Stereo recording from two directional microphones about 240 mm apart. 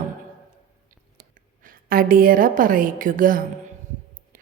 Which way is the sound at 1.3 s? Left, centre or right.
Right.